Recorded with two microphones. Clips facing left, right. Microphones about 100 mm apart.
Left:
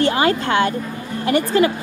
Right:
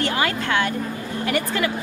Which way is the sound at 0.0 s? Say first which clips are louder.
Left 6 dB; 25° left (ahead or behind).